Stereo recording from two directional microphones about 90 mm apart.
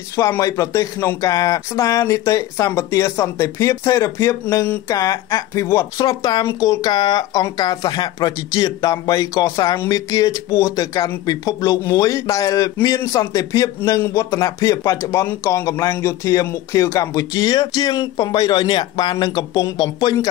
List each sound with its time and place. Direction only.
0.4 s speech: 40° left (ahead or behind)
6.9 s speech: 55° left (ahead or behind)